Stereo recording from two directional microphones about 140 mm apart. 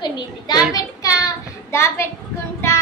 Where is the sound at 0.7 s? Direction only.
25° left (ahead or behind).